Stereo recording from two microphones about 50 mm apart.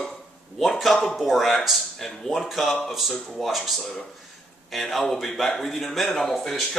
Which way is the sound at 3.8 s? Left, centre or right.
Centre.